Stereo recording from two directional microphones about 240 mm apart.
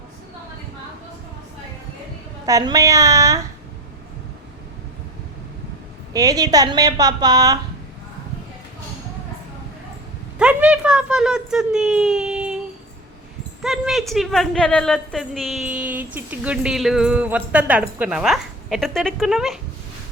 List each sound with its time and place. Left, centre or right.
2.5 s a woman's voice: centre
6.1 s a woman's voice: centre
10.3 s a sound: centre
13.6 s a woman's voice: centre